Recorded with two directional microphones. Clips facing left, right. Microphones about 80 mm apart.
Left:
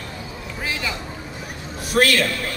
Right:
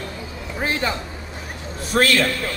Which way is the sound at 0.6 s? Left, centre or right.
Right.